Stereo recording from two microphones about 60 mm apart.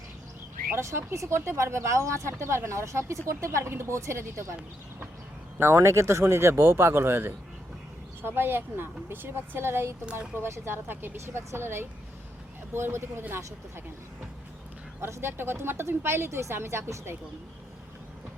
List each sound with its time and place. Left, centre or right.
0.8 s speech: right
5.5 s speech: right
15.0 s speech: right